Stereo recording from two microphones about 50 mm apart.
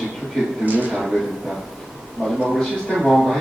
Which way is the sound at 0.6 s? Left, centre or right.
Right.